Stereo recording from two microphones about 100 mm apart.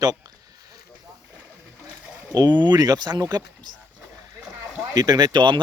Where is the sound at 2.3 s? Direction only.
45° right (ahead or behind).